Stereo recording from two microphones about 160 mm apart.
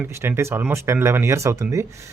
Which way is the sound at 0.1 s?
15° right (ahead or behind).